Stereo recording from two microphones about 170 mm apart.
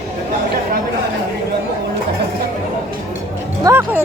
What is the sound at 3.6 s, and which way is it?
Music, 15° right (ahead or behind).